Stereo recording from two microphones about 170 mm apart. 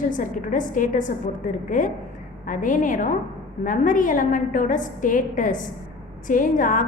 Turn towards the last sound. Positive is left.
turn(degrees=50)  # may be behind; listen again after turning